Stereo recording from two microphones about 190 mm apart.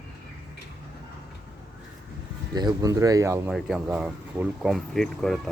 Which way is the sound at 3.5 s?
Centre (ahead or behind).